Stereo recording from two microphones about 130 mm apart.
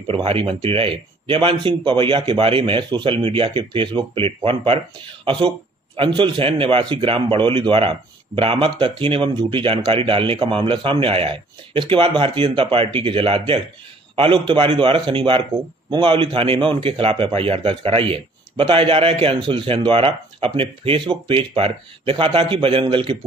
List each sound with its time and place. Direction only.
0.1 s speech: 45° right (ahead or behind)